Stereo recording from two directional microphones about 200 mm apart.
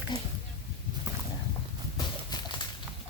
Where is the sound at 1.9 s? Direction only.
20° left (ahead or behind).